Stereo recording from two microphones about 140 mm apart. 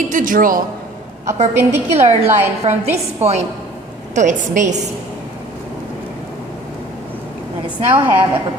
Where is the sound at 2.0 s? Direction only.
50° right (ahead or behind).